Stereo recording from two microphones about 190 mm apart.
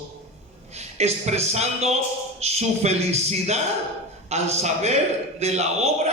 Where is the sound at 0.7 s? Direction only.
35° right (ahead or behind).